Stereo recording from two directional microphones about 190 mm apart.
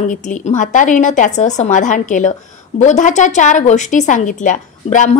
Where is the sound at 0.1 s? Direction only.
40° left (ahead or behind).